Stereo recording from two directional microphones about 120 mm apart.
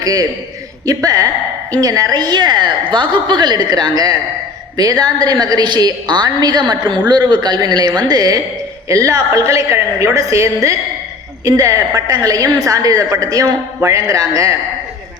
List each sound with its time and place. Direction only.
0.0 s a man's voice: 30° right (ahead or behind)